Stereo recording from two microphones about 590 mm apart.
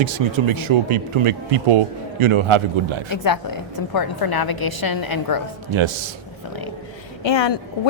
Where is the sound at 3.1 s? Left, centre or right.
Left.